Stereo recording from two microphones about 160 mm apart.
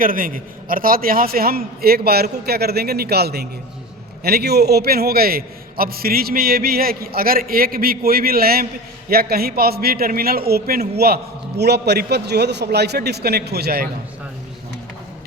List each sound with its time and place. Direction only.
0.0 s a man's voice: 60° right (ahead or behind); by 13.8 s 80° right